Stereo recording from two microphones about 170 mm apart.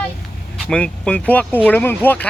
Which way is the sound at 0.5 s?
5° left (ahead or behind).